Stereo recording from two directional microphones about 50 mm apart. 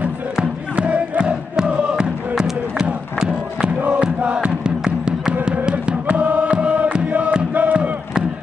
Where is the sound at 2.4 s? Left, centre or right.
Centre.